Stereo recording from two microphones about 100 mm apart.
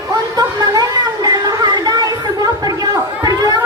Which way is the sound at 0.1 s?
40° right (ahead or behind).